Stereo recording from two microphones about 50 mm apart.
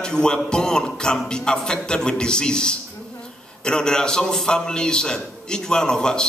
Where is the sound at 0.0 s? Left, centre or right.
Centre.